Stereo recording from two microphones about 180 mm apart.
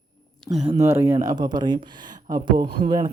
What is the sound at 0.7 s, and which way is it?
Speech, 15° right (ahead or behind).